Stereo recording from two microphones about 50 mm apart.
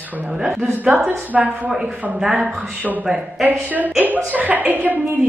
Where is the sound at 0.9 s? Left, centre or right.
Right.